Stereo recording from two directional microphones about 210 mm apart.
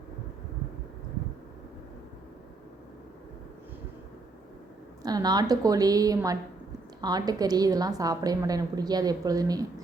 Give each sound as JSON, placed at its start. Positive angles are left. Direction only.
{"t": 5.0, "sound": "a woman's voice", "side_deg": -20}